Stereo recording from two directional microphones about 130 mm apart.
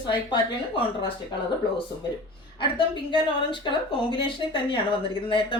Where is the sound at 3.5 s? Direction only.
40° left (ahead or behind).